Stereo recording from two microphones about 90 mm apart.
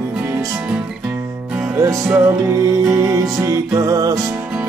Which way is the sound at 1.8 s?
30° right (ahead or behind).